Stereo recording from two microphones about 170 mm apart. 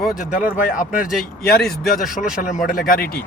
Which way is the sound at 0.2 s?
50° left (ahead or behind).